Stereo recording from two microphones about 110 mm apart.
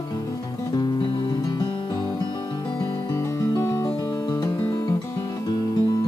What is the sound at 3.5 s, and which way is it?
Music, 25° left (ahead or behind).